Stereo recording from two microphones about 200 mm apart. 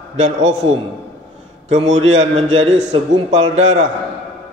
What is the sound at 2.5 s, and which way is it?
A man's voice, 70° right (ahead or behind).